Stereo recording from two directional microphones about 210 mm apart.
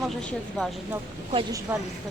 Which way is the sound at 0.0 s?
Centre (ahead or behind).